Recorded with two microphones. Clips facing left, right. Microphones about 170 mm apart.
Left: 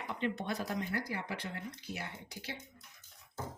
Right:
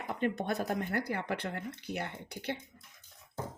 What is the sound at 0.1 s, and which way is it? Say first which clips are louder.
Speech: right 4 dB; 50° right (ahead or behind).